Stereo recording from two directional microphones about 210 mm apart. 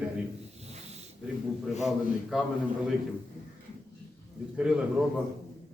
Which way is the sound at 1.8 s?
Centre (ahead or behind).